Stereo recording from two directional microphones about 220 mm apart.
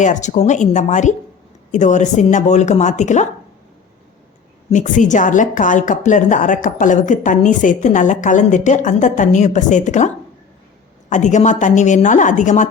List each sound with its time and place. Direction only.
0.0 s speech: 35° left (ahead or behind)
4.7 s speech: 35° left (ahead or behind)
11.1 s speech: 35° left (ahead or behind)